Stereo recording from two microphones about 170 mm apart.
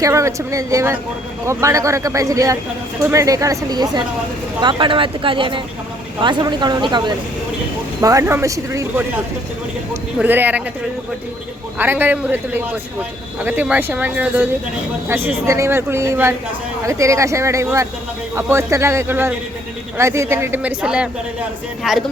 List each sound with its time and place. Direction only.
0.0 s a man's voice: 20° right (ahead or behind)
10.2 s a man's voice: 10° right (ahead or behind)
11.8 s a man's voice: 10° right (ahead or behind)